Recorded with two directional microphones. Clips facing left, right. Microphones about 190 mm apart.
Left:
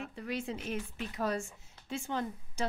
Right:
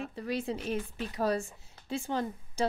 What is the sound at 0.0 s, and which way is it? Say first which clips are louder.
A woman's voice: right 4 dB; 35° right (ahead or behind).